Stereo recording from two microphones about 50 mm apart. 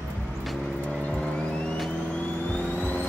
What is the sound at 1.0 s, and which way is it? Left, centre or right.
Vehicle, left.